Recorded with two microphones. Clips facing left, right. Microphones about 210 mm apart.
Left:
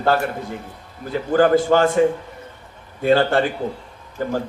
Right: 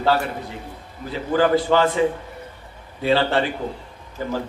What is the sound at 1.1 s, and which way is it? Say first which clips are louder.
A man's voice: left 3 dB; 45° left (ahead or behind).